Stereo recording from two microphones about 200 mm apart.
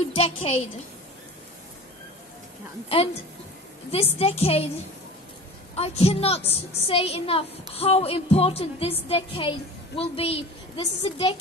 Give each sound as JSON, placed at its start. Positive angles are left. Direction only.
{"t": 0.1, "sound": "a woman's voice", "side_deg": 25}
{"t": 3.9, "sound": "a woman's voice", "side_deg": 30}
{"t": 5.8, "sound": "a woman's voice", "side_deg": 30}